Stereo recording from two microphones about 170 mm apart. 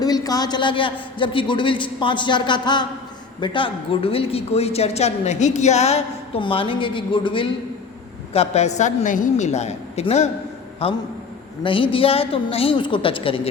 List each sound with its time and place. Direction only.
0.0 s a man's voice: 20° left (ahead or behind)